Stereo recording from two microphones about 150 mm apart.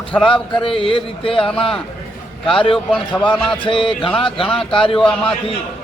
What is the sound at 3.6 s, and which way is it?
Speech, 35° left (ahead or behind).